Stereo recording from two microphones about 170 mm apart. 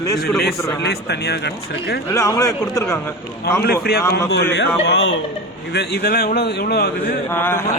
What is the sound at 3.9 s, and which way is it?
Speech, 65° left (ahead or behind).